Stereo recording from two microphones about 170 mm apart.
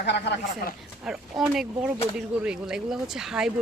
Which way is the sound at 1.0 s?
5° right (ahead or behind).